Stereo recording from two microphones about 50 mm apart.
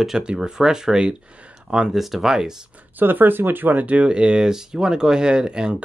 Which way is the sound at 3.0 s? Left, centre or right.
Right.